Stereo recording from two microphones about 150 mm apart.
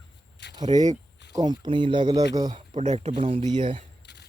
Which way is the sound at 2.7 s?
55° right (ahead or behind).